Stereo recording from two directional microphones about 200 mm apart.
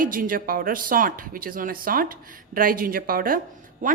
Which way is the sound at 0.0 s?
45° right (ahead or behind).